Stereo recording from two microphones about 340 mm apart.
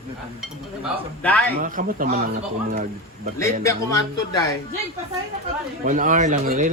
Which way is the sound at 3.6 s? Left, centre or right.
Centre.